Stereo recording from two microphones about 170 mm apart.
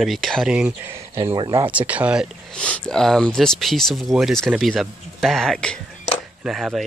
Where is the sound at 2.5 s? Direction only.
5° left (ahead or behind).